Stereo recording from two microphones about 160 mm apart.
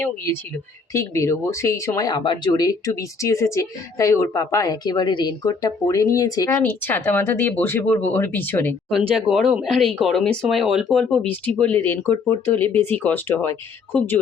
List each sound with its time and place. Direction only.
0.9 s speech: 20° left (ahead or behind)
6.6 s speech: 10° left (ahead or behind)
8.9 s speech: centre (ahead or behind)